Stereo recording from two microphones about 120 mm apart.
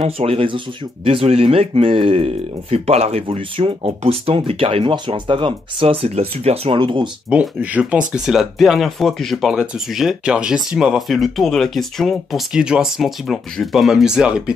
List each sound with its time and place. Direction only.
0.0 s speech: 55° right (ahead or behind)
4.9 s speech: 40° right (ahead or behind)
7.2 s speech: 10° right (ahead or behind)